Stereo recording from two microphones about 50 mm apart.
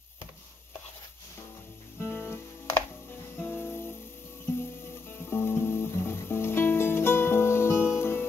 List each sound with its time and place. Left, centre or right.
2.0 s music: left
5.1 s music: left